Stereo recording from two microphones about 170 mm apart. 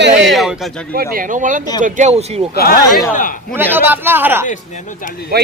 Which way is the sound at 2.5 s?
60° left (ahead or behind).